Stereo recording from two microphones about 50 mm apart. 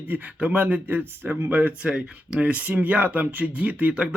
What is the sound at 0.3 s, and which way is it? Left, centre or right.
Speech, right.